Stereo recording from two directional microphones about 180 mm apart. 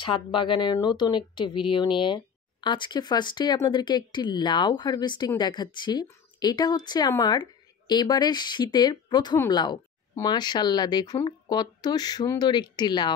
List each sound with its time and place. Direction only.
0.0 s speech: 25° left (ahead or behind)